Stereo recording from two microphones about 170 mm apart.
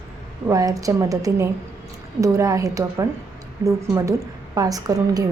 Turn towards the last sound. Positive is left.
turn(degrees=-20)  # may be behind; listen again after turning